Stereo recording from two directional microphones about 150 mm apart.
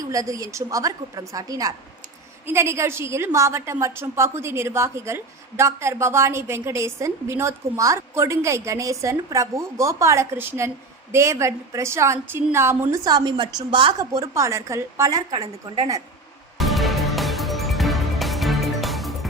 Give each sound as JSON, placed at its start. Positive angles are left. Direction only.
{"t": 0.0, "sound": "a woman's voice", "side_deg": -20}
{"t": 14.1, "sound": "a woman's voice", "side_deg": -20}
{"t": 16.6, "sound": "music", "side_deg": 0}